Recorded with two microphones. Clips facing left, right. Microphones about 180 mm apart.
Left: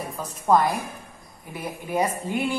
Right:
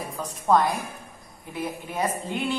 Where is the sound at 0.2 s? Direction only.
10° left (ahead or behind).